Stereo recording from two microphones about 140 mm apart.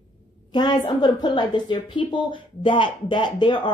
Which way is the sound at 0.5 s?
30° left (ahead or behind).